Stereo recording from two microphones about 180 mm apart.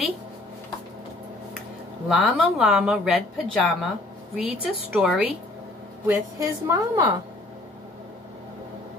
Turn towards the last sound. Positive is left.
turn(degrees=-20)  # may be behind; listen again after turning